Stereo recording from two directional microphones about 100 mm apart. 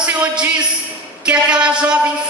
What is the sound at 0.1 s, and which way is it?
A man's voice, 15° right (ahead or behind).